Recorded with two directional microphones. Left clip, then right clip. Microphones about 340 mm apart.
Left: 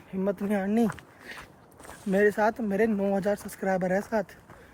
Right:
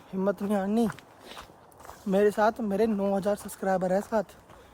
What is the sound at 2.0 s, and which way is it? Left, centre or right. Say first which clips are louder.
Speech: even; centre.